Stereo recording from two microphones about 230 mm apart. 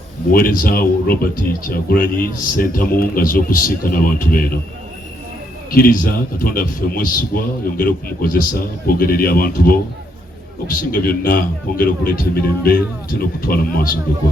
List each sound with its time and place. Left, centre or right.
0.3 s a man's voice: left
5.7 s a man's voice: left